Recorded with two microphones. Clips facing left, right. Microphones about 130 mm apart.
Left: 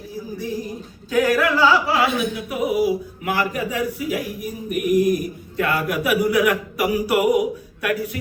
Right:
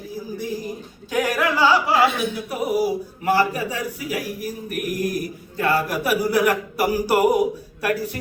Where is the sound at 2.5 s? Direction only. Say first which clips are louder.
Left 2 dB; 40° right (ahead or behind).